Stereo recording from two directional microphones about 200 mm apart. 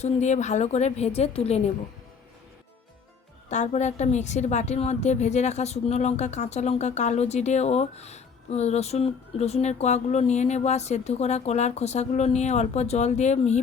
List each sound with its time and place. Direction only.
0.0 s a woman's voice: 35° left (ahead or behind)
3.5 s a woman's voice: 35° left (ahead or behind)